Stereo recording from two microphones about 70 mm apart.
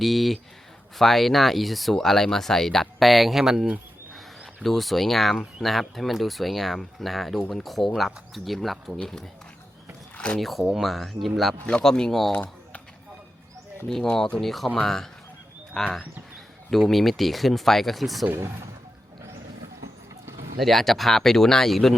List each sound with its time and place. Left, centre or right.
0.0 s speech: centre
4.6 s speech: centre
10.4 s speech: centre
11.6 s speech: centre
12.3 s typing: left
13.8 s speech: centre
18.3 s speech: right
20.6 s speech: centre